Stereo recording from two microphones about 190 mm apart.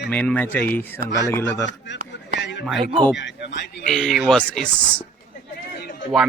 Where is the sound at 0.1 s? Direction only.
5° left (ahead or behind).